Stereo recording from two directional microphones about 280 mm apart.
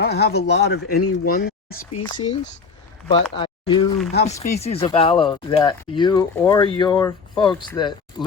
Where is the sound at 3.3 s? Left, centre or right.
Centre.